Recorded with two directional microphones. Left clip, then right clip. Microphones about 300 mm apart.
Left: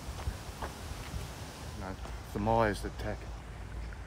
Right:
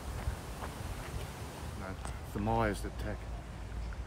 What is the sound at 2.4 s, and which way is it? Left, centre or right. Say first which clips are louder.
Speech: left 4 dB; left.